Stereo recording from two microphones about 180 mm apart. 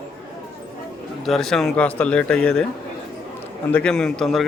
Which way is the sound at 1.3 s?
Centre (ahead or behind).